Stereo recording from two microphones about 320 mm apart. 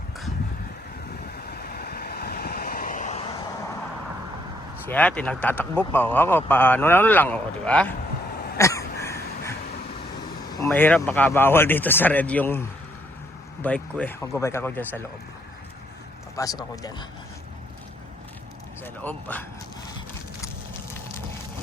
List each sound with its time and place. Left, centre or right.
1.5 s vehicle: left
4.9 s speech: centre
8.5 s a sound: centre
10.5 s speech: centre
16.3 s speech: centre
18.8 s speech: centre